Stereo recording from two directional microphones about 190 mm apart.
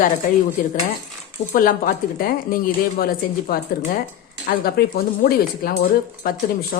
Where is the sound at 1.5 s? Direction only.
45° left (ahead or behind).